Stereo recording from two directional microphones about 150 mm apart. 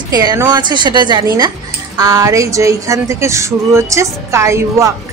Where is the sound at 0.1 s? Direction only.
25° right (ahead or behind).